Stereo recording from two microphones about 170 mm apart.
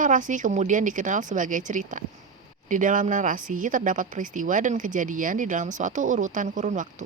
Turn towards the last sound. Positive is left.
turn(degrees=-45)  # may be behind; listen again after turning